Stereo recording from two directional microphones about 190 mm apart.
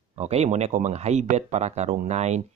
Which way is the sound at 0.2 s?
35° right (ahead or behind).